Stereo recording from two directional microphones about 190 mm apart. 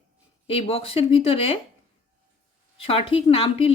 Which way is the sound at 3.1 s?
30° left (ahead or behind).